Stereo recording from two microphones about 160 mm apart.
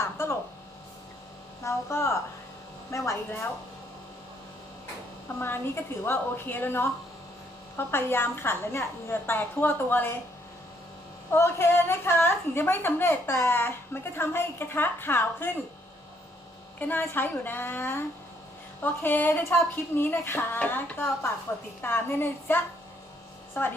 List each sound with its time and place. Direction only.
1.6 s a woman's voice: 15° left (ahead or behind)
5.4 s a woman's voice: 15° left (ahead or behind)
11.3 s a woman's voice: 15° left (ahead or behind)
16.8 s a woman's voice: 15° left (ahead or behind)